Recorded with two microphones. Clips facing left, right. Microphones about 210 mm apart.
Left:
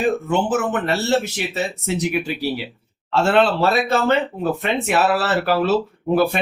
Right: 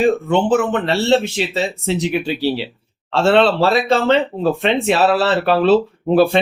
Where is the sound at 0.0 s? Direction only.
25° right (ahead or behind).